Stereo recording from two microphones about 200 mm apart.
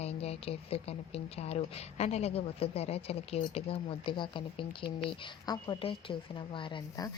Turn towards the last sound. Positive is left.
turn(degrees=25)  # may be behind; listen again after turning